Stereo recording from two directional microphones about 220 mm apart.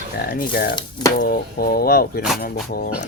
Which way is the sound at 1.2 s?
40° left (ahead or behind).